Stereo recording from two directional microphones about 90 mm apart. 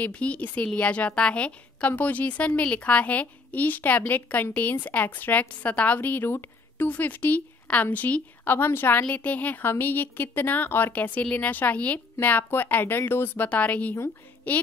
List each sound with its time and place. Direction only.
0.0 s a woman's voice: 15° left (ahead or behind)